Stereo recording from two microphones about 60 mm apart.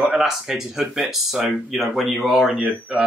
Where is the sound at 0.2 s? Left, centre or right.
Centre.